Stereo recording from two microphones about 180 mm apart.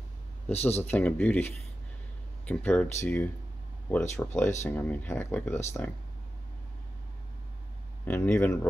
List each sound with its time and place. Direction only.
0.5 s speech: 35° left (ahead or behind)
0.8 s speech: 10° left (ahead or behind)
8.0 s speech: 10° left (ahead or behind)